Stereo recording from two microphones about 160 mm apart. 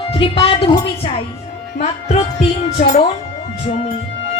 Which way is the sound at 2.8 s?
50° left (ahead or behind).